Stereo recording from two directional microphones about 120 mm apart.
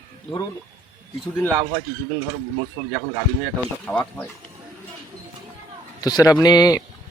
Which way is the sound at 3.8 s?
15° left (ahead or behind).